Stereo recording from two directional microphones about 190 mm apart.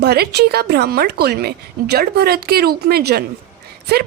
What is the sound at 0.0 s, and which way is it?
A woman's voice, 60° right (ahead or behind).